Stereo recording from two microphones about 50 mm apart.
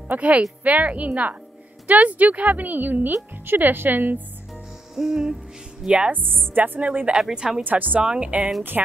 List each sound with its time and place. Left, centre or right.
0.1 s a woman's voice: right
4.9 s music: centre
5.9 s a woman's voice: centre
6.1 s a woman's voice: right
6.9 s a woman's voice: right
7.2 s music: centre
7.6 s a woman's voice: right
8.0 s a woman's voice: right